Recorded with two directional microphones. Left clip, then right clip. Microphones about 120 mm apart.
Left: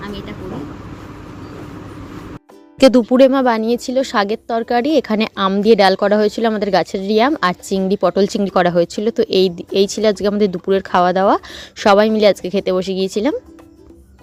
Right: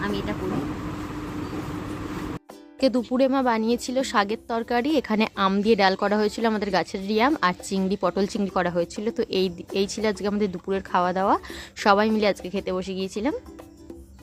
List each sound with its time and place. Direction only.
3.0 s speech: 55° left (ahead or behind)
3.6 s speech: 35° left (ahead or behind)
8.4 s speech: 50° left (ahead or behind)